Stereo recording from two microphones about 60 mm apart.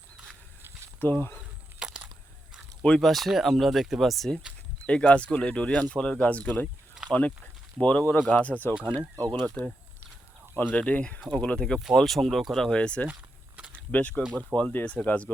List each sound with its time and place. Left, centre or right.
0.9 s speech: left
1.8 s a sound: centre
3.0 s speech: centre
4.9 s speech: centre
11.9 s speech: centre; by 15.3 s left